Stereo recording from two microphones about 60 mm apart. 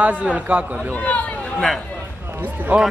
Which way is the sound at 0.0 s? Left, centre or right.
Right.